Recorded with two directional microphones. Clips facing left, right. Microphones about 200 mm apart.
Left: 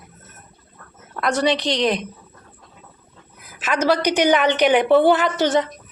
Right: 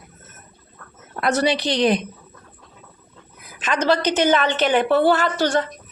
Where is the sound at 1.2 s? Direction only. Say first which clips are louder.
Even; 5° right (ahead or behind).